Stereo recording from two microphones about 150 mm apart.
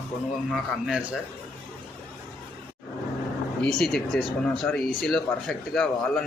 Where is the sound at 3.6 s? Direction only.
5° left (ahead or behind).